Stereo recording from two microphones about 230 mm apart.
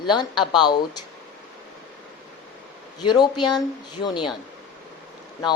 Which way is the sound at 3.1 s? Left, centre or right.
Centre.